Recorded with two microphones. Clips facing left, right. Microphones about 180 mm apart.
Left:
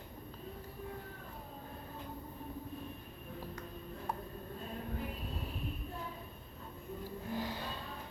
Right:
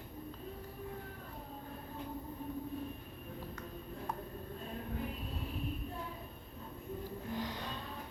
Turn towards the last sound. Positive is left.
turn(degrees=5)  # may be behind; listen again after turning